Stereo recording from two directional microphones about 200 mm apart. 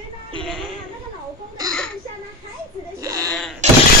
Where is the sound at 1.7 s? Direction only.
5° left (ahead or behind).